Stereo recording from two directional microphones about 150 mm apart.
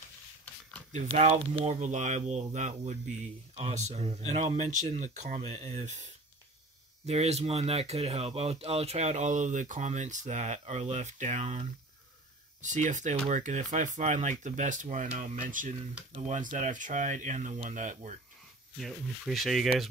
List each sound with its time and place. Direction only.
0.9 s speech: 45° right (ahead or behind)
7.1 s speech: 45° right (ahead or behind)
18.8 s speech: centre (ahead or behind)